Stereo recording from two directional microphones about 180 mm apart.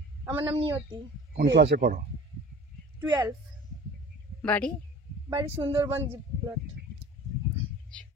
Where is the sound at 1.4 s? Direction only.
75° right (ahead or behind).